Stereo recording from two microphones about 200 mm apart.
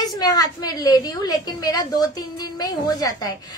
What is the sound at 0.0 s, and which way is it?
A woman's voice, 20° left (ahead or behind).